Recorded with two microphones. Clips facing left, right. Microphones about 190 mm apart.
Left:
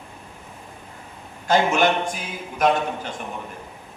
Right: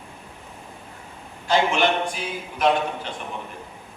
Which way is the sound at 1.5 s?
45° left (ahead or behind).